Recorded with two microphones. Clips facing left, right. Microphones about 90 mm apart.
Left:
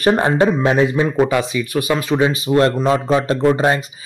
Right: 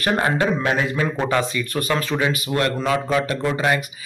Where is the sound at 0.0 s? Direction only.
25° left (ahead or behind).